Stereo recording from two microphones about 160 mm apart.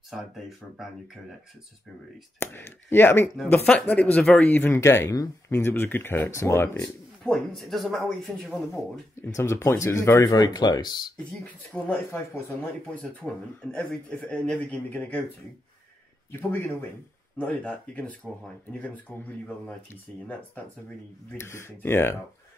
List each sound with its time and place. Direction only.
0.1 s a man's voice: centre (ahead or behind)
2.4 s speech: 15° left (ahead or behind)
7.3 s a man's voice: centre (ahead or behind)
9.2 s speech: 15° left (ahead or behind)
11.7 s speech: 10° left (ahead or behind)
16.3 s speech: 15° left (ahead or behind)